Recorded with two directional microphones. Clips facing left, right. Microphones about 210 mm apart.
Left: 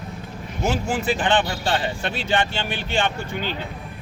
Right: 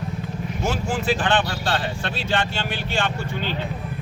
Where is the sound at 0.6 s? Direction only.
15° left (ahead or behind).